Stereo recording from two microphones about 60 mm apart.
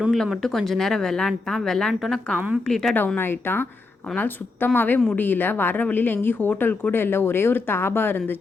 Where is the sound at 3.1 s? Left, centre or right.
Left.